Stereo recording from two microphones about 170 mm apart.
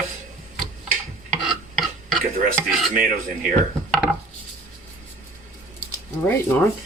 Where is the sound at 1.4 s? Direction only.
Centre (ahead or behind).